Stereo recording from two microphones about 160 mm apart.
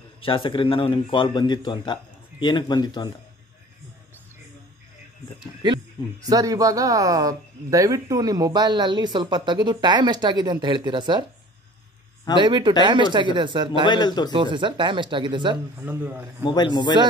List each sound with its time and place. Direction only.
0.2 s a man's voice: 30° left (ahead or behind)
6.2 s speech: 25° right (ahead or behind)
12.4 s speech: 30° right (ahead or behind)
13.8 s speech: 25° left (ahead or behind)
14.3 s speech: 30° right (ahead or behind)
15.8 s a man's voice: 10° right (ahead or behind)
16.4 s speech: 30° left (ahead or behind)